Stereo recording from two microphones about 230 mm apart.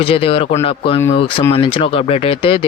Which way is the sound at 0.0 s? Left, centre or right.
Left.